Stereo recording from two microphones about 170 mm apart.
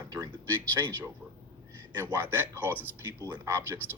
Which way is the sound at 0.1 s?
25° right (ahead or behind).